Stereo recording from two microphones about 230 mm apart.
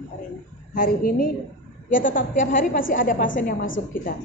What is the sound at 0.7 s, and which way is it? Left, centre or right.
A woman's voice, left.